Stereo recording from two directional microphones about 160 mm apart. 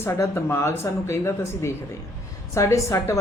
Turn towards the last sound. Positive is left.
turn(degrees=20)  # may be behind; listen again after turning